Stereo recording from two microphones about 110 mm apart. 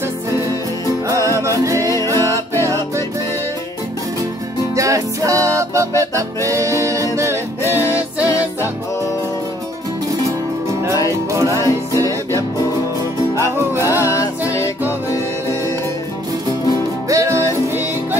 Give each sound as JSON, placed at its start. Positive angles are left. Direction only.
{"t": 1.3, "sound": "music", "side_deg": -30}
{"t": 1.8, "sound": "music", "side_deg": 25}
{"t": 4.7, "sound": "music", "side_deg": -30}
{"t": 10.7, "sound": "music", "side_deg": -25}
{"t": 13.8, "sound": "music", "side_deg": 30}
{"t": 17.1, "sound": "music", "side_deg": -25}